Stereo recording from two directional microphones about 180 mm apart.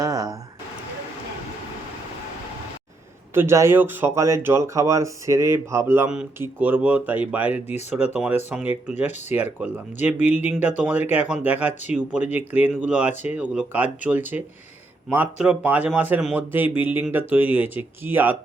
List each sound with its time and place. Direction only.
0.0 s a sound: 20° right (ahead or behind)
3.3 s speech: 15° right (ahead or behind)
11.7 s speech: 40° left (ahead or behind)
11.9 s speech: 10° right (ahead or behind)